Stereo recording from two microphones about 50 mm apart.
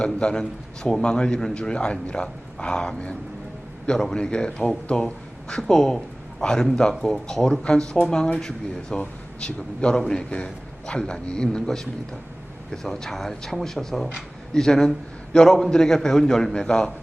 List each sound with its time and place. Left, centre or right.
0.0 s a man's voice: centre